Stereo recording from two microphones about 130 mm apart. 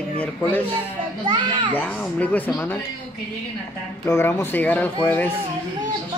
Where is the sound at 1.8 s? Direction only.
10° left (ahead or behind).